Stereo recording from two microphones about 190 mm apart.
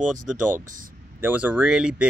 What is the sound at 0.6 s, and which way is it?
Speech, 45° right (ahead or behind).